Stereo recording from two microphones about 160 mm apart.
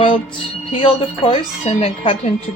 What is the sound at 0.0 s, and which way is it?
A woman's voice, 35° left (ahead or behind).